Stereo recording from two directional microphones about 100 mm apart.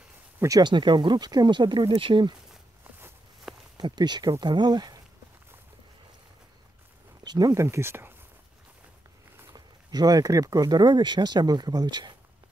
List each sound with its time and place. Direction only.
0.4 s speech: 35° right (ahead or behind)
0.7 s speech: 50° right (ahead or behind)
3.7 s speech: 45° right (ahead or behind)
7.2 s speech: 40° right (ahead or behind)
7.6 s speech: 25° right (ahead or behind)
9.5 s speech: 40° right (ahead or behind)